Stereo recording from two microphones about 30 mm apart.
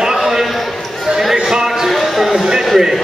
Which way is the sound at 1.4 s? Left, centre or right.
Centre.